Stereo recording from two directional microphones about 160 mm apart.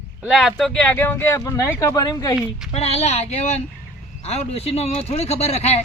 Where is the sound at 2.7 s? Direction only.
40° left (ahead or behind).